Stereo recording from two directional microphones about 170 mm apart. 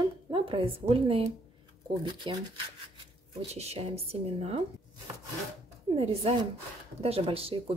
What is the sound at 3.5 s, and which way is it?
Speech, 35° right (ahead or behind).